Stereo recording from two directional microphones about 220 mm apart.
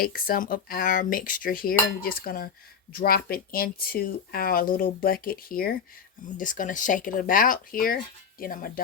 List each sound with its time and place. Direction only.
0.0 s speech: 40° left (ahead or behind)